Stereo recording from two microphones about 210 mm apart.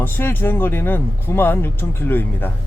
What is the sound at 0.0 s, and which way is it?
Speech, 10° left (ahead or behind).